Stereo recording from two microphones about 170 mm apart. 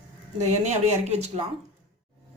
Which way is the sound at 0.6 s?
40° right (ahead or behind).